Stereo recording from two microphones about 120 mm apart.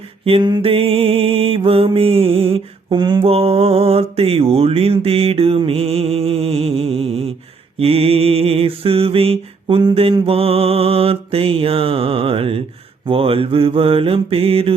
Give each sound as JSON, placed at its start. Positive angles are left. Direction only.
{"t": 0.6, "sound": "mantra", "side_deg": -50}
{"t": 2.9, "sound": "mantra", "side_deg": -40}
{"t": 3.2, "sound": "mantra", "side_deg": -55}